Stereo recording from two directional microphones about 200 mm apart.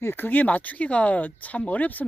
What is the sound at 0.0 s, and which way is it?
Speech, 10° left (ahead or behind).